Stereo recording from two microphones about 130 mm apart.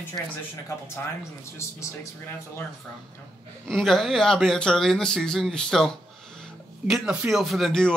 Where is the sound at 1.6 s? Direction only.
20° left (ahead or behind).